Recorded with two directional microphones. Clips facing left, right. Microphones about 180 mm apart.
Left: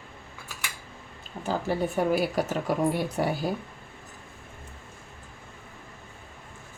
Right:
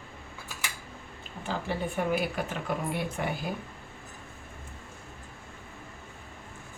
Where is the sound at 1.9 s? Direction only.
40° left (ahead or behind).